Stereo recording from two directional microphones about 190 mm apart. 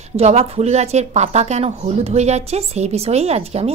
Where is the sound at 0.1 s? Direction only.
35° right (ahead or behind).